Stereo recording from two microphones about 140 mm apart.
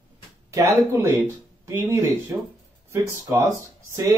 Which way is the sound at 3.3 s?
25° right (ahead or behind).